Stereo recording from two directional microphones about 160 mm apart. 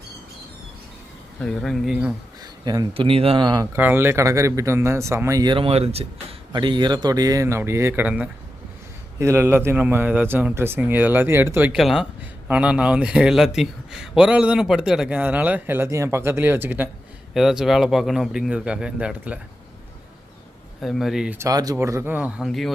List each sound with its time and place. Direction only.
1.4 s a man's voice: 5° left (ahead or behind)
2.4 s speech: 25° right (ahead or behind)
3.7 s a man's voice: 15° right (ahead or behind); by 6.1 s 40° right (ahead or behind)
6.5 s a man's voice: 30° right (ahead or behind); by 11.8 s 10° right (ahead or behind)
11.8 s a man's voice: centre (ahead or behind)
20.8 s a man's voice: centre (ahead or behind)
21.3 s a man's voice: 20° right (ahead or behind); by 22.7 s centre (ahead or behind)